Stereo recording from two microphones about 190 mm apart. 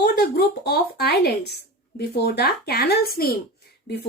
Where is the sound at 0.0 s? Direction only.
55° left (ahead or behind).